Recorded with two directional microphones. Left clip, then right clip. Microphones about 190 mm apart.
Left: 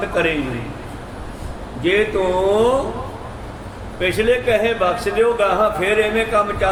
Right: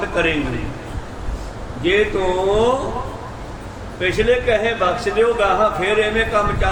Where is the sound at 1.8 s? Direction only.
15° left (ahead or behind).